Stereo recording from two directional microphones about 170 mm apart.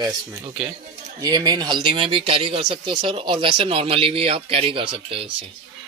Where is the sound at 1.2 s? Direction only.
25° right (ahead or behind).